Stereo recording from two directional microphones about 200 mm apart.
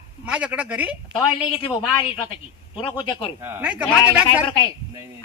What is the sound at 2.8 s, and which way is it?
Speech, 25° left (ahead or behind).